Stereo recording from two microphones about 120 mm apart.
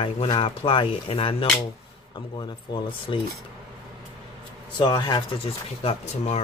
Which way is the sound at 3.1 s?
45° left (ahead or behind).